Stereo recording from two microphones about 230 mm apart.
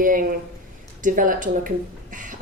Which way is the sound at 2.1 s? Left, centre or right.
Right.